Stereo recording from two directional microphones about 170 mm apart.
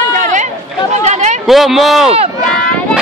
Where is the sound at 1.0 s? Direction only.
40° right (ahead or behind).